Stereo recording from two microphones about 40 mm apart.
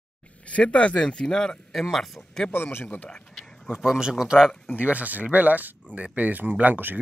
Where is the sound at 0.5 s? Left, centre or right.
Left.